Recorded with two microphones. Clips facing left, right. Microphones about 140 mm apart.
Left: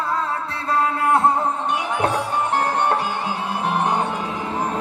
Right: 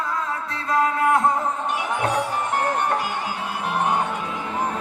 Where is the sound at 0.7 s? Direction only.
30° left (ahead or behind).